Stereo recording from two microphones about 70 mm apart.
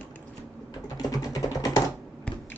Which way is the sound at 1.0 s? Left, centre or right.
Left.